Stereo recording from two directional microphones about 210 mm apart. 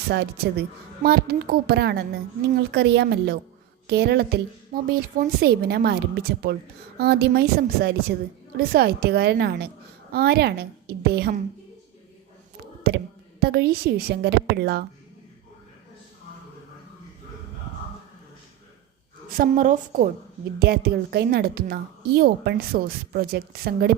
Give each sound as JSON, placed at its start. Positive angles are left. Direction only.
{"t": 0.1, "sound": "a woman's voice", "side_deg": -50}
{"t": 13.4, "sound": "a woman's voice", "side_deg": -50}
{"t": 19.3, "sound": "a woman's voice", "side_deg": -40}